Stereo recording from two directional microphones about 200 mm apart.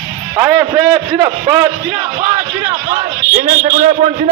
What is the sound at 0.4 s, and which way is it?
A man's voice, 10° right (ahead or behind).